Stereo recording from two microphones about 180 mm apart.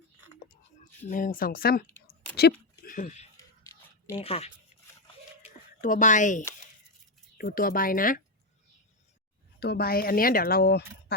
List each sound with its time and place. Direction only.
1.0 s speech: 50° left (ahead or behind)
3.3 s a sound: 20° left (ahead or behind)
4.2 s speech: 35° left (ahead or behind)
5.8 s speech: 45° left (ahead or behind)
9.6 s speech: 65° left (ahead or behind)